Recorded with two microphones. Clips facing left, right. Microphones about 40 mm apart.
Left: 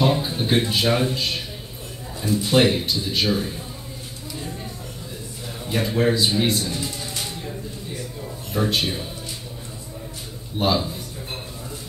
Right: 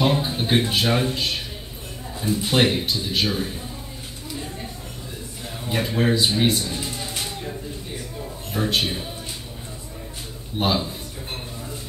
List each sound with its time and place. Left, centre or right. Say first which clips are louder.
0.0 s a man's voice: even; centre
0.7 s speech: left 1 dB; centre
2.1 s a man's voice: left 2 dB; centre
5.7 s a man's voice: left 1 dB; centre
6.7 s a sound: even; centre
8.5 s speech: left 1 dB; centre
10.6 s a man's voice: left 1 dB; centre